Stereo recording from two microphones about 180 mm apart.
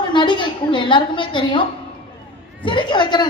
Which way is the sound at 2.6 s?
25° left (ahead or behind).